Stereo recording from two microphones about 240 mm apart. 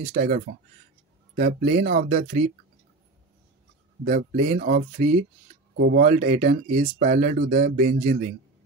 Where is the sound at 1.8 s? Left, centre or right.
Right.